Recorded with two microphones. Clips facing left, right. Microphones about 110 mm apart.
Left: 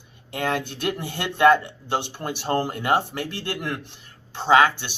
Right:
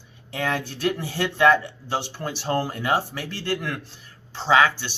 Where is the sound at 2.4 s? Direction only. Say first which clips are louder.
Left 1 dB; 50° left (ahead or behind).